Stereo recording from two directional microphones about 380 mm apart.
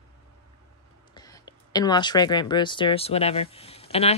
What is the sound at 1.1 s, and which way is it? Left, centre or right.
Speech, centre.